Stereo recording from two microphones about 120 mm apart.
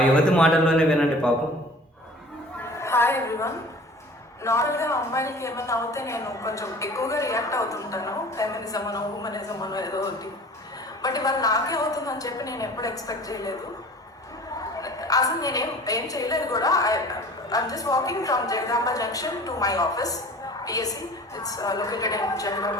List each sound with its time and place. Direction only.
0.3 s speech: 5° left (ahead or behind)
2.7 s a sound: 20° left (ahead or behind)
4.4 s a woman's voice: 25° left (ahead or behind)
14.8 s a woman's voice: 30° left (ahead or behind)